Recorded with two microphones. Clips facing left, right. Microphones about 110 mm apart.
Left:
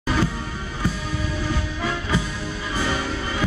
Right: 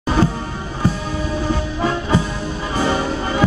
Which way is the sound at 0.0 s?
30° right (ahead or behind).